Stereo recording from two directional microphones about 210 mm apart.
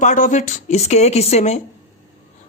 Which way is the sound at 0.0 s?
35° left (ahead or behind).